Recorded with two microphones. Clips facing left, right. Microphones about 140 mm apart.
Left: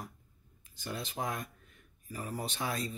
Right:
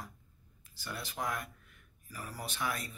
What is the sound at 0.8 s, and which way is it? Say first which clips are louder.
Speech: left 2 dB; 20° left (ahead or behind).